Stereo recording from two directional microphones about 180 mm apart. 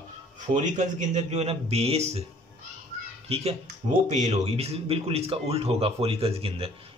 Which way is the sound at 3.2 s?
35° right (ahead or behind).